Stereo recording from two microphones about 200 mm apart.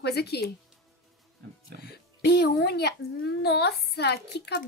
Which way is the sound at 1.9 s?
55° left (ahead or behind).